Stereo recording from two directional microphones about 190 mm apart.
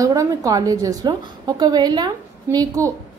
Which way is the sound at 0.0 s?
20° right (ahead or behind).